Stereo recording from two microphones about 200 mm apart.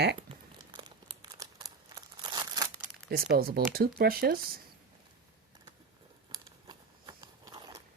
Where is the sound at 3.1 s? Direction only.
50° right (ahead or behind).